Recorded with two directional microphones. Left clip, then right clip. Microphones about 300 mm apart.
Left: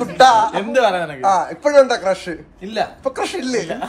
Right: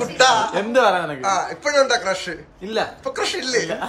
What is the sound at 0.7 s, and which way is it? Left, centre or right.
Speech, centre.